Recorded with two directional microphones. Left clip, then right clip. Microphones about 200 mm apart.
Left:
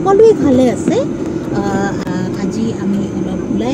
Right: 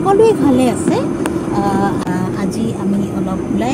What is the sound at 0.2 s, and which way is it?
Speech, 20° right (ahead or behind).